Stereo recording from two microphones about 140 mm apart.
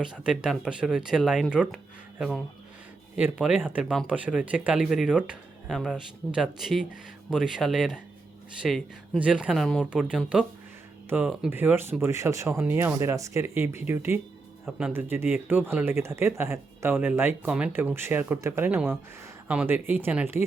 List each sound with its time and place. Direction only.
0.0 s speech: 5° right (ahead or behind)
14.6 s speech: 5° right (ahead or behind)